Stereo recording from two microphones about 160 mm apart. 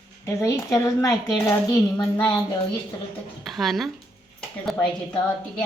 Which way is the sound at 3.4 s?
Centre (ahead or behind).